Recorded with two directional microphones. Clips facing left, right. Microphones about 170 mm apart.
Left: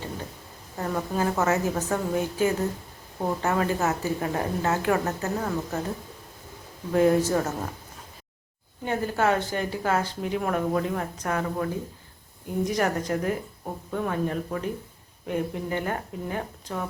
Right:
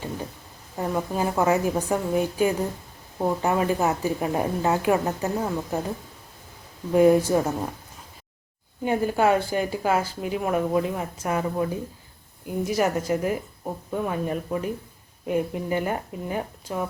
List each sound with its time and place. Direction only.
0.9 s speech: 15° right (ahead or behind)
6.9 s speech: 15° right (ahead or behind)
8.8 s speech: 15° right (ahead or behind)